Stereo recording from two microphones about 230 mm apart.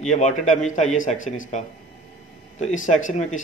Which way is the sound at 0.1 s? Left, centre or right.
Left.